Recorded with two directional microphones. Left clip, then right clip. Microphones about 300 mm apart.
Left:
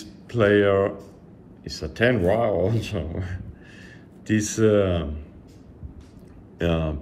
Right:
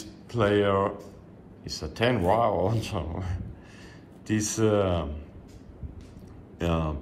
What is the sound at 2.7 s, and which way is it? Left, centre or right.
Speech, left.